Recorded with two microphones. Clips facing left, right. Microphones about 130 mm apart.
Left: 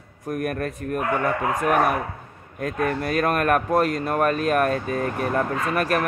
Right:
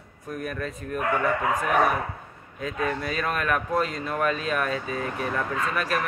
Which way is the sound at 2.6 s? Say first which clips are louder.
Left 4 dB; 55° left (ahead or behind).